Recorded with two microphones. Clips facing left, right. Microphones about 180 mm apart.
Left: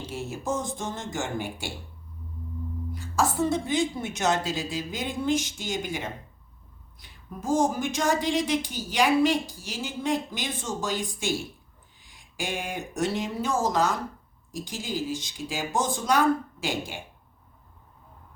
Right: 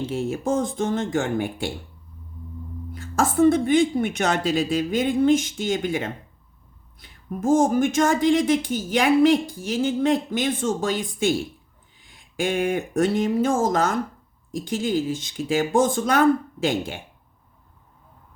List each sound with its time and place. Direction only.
0.0 s speech: 60° right (ahead or behind)
2.9 s speech: 55° right (ahead or behind)